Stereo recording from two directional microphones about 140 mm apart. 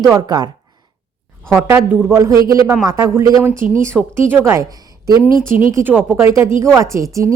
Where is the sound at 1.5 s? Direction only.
15° right (ahead or behind).